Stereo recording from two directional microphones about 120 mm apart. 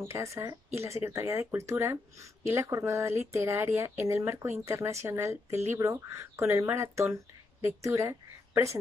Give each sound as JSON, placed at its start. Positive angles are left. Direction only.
{"t": 0.1, "sound": "speech", "side_deg": -25}